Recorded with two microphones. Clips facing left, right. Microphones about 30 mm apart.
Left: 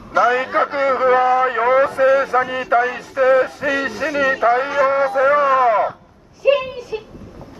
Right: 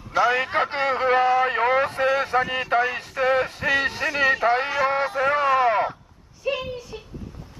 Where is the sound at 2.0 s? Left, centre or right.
Centre.